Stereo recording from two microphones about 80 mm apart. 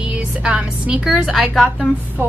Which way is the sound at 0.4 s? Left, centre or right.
Centre.